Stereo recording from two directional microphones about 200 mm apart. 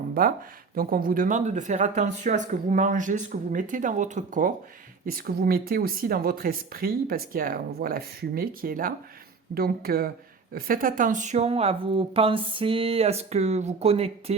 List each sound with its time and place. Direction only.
0.1 s speech: 45° right (ahead or behind); by 14.3 s 30° right (ahead or behind)